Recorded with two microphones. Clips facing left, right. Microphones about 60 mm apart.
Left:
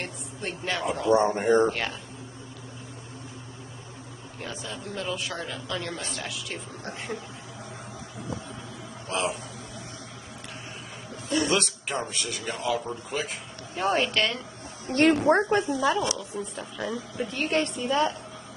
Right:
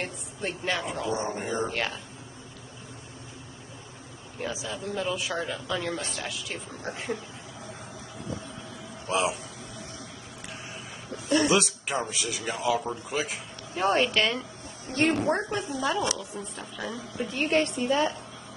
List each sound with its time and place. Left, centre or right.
0.0 s a man's voice: centre
1.1 s speech: left
1.7 s a man's voice: centre
4.4 s a man's voice: centre
9.1 s a man's voice: centre
11.4 s a man's voice: centre
14.9 s a woman's voice: left
15.8 s a man's voice: centre
17.7 s a woman's voice: right